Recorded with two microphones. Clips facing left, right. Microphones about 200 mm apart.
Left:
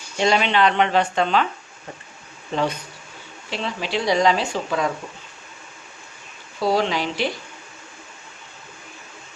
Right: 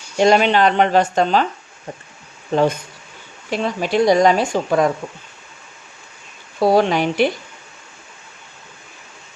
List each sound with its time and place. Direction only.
0.2 s speech: 45° right (ahead or behind)
2.5 s speech: 50° right (ahead or behind)
6.6 s speech: 55° right (ahead or behind)